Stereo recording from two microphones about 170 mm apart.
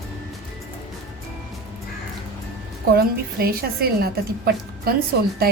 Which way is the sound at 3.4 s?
65° right (ahead or behind).